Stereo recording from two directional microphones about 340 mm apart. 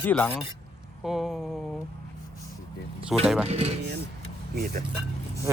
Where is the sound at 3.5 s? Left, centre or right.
Centre.